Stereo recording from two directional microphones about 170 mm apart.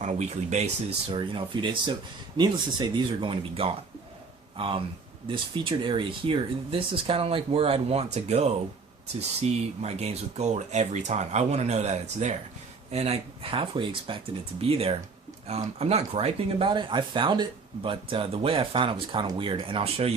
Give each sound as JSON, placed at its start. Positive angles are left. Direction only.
{"t": 0.0, "sound": "speech", "side_deg": -40}